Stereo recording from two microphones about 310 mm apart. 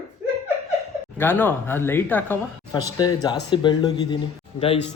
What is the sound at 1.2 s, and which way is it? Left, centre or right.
A man's voice, centre.